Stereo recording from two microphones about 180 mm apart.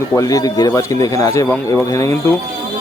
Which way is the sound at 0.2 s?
20° left (ahead or behind).